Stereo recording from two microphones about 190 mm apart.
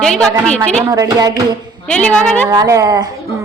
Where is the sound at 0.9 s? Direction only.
20° right (ahead or behind).